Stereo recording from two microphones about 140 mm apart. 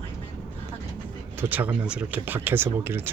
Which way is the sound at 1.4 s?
10° right (ahead or behind).